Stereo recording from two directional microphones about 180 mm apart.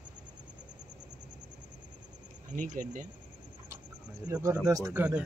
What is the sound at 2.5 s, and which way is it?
Speech, 45° right (ahead or behind).